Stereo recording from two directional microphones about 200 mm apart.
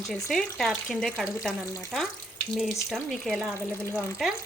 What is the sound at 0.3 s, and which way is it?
A woman's voice, centre (ahead or behind).